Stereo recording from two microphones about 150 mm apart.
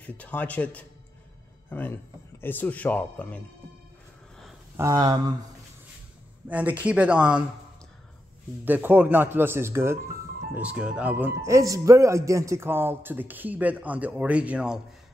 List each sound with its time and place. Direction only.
0.0 s speech: 10° left (ahead or behind)
4.7 s speech: 20° right (ahead or behind)
6.5 s speech: 10° right (ahead or behind)
8.6 s speech: 10° right (ahead or behind)